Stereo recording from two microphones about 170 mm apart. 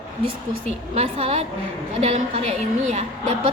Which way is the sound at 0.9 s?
35° right (ahead or behind).